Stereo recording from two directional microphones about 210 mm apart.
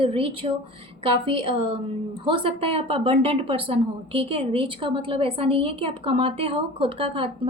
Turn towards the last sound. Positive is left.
turn(degrees=-25)  # may be behind; listen again after turning